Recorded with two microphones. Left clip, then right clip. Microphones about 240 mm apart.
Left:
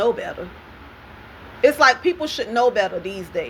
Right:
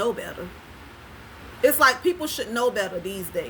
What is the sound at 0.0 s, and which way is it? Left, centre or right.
Speech, right.